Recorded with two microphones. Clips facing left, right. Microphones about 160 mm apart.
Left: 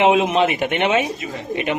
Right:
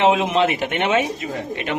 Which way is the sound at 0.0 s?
15° left (ahead or behind).